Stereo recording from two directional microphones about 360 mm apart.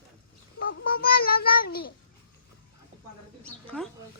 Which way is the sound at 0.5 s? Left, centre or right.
Left.